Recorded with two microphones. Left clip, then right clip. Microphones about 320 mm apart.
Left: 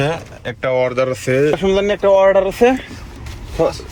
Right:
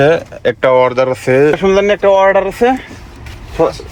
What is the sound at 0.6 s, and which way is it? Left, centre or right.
Speech, centre.